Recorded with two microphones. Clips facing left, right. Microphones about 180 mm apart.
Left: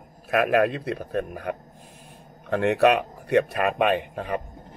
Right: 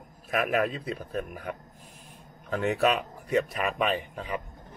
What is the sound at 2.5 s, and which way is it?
A man's voice, 65° left (ahead or behind).